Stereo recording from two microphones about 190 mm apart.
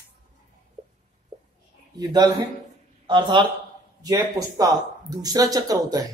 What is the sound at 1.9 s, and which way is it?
Speech, 20° right (ahead or behind).